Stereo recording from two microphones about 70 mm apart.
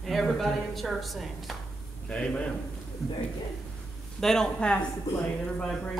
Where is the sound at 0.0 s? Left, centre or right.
Centre.